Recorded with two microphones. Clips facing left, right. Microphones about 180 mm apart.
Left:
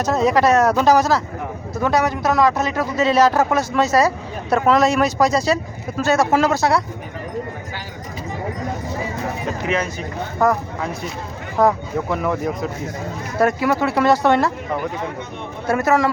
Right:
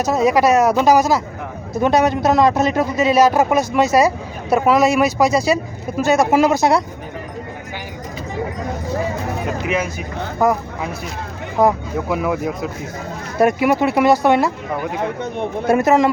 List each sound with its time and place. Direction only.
0.0 s speech: 10° right (ahead or behind)
1.8 s speech: 20° right (ahead or behind)
9.6 s speech: 5° right (ahead or behind)
15.6 s a man's voice: 20° right (ahead or behind)